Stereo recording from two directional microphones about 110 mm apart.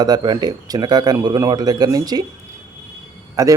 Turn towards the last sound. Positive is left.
turn(degrees=-30)  # may be behind; listen again after turning